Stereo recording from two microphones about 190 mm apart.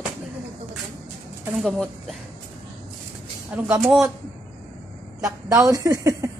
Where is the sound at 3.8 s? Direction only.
Centre (ahead or behind).